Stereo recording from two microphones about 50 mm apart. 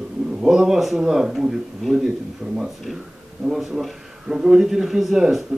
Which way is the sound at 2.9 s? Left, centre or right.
Centre.